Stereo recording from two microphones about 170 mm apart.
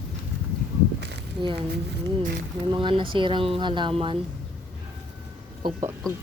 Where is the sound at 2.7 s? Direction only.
30° right (ahead or behind).